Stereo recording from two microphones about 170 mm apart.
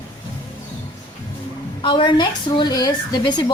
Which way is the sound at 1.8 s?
30° left (ahead or behind).